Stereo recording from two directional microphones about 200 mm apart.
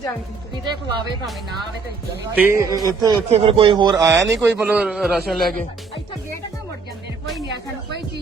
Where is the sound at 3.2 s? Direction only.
30° right (ahead or behind); by 5.5 s centre (ahead or behind).